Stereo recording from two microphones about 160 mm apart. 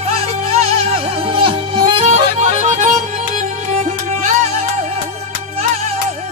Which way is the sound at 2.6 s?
50° right (ahead or behind).